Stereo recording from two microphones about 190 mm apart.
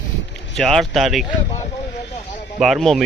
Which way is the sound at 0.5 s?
Centre (ahead or behind).